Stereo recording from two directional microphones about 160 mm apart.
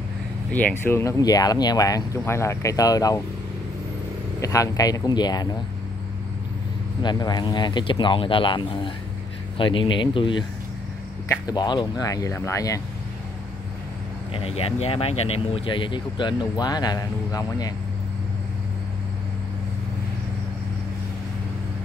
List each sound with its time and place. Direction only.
0.5 s speech: 10° left (ahead or behind)
4.4 s speech: 20° left (ahead or behind)
7.0 s speech: 25° left (ahead or behind)
14.3 s speech: 40° left (ahead or behind)